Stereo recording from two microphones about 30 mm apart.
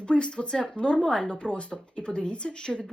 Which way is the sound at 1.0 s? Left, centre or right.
Centre.